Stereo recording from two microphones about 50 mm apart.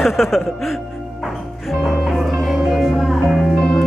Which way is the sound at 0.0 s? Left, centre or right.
Centre.